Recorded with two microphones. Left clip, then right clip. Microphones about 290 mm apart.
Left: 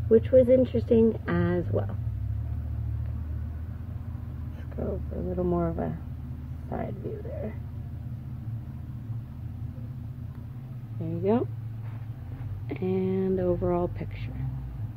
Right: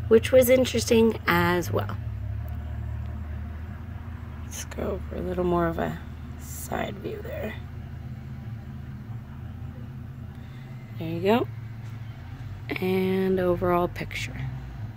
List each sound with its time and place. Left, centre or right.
0.1 s speech: centre
4.7 s speech: right
11.0 s speech: centre
12.6 s speech: centre